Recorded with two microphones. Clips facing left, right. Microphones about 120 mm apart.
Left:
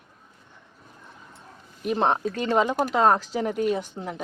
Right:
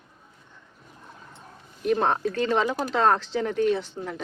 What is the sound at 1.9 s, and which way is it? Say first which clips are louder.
Speech: left 2 dB; 20° left (ahead or behind).